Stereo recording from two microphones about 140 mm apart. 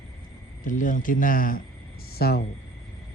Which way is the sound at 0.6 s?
70° left (ahead or behind).